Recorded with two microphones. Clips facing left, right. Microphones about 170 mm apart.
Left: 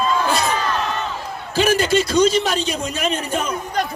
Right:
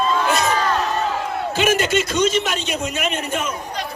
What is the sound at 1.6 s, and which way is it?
A man's voice, 35° left (ahead or behind).